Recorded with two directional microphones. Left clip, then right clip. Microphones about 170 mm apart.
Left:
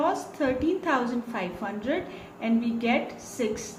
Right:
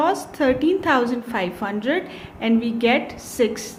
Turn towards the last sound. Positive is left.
turn(degrees=-55)  # may be behind; listen again after turning